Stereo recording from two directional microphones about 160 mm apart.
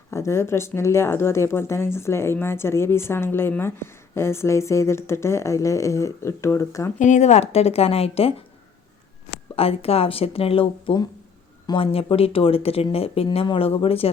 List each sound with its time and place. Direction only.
0.1 s speech: 15° left (ahead or behind)
7.0 s speech: 45° left (ahead or behind)
9.6 s speech: 35° left (ahead or behind)